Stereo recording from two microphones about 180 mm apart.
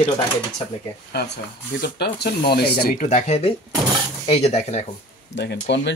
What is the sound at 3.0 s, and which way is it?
Speech, 40° left (ahead or behind).